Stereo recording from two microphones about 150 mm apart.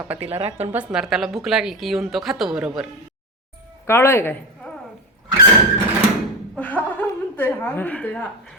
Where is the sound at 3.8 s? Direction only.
15° left (ahead or behind).